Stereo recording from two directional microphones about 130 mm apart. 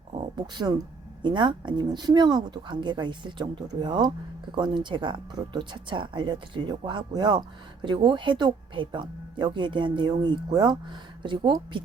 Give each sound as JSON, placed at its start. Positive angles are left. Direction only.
{"t": 0.3, "sound": "speech", "side_deg": -35}